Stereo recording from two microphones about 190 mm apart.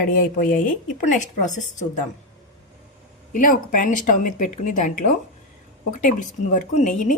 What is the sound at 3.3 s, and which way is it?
Speech, 45° left (ahead or behind).